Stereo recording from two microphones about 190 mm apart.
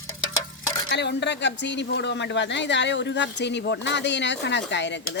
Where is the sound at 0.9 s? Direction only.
65° left (ahead or behind).